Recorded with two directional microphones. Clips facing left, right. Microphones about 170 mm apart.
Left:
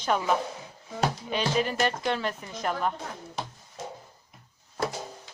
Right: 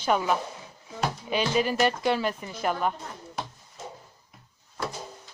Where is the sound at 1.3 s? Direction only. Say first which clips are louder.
Right 5 dB; 5° right (ahead or behind).